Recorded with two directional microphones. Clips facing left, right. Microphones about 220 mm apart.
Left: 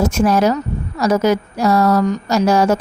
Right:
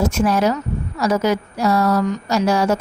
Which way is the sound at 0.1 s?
40° left (ahead or behind).